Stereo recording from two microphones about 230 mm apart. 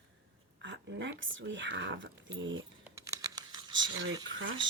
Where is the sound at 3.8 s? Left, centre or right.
Right.